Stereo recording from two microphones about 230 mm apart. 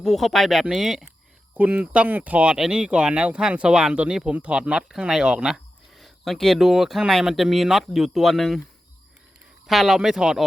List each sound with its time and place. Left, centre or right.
0.0 s speech: centre
9.6 s speech: centre